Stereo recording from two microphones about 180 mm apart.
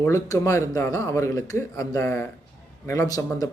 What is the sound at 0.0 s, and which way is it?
Speech, 15° left (ahead or behind).